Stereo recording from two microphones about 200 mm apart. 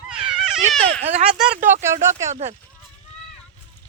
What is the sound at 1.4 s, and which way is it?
Speech, 10° right (ahead or behind).